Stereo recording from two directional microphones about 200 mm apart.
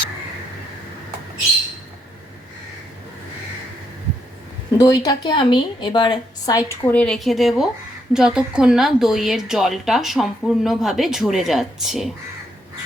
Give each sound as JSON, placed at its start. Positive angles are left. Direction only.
{"t": 4.8, "sound": "a woman's voice", "side_deg": 15}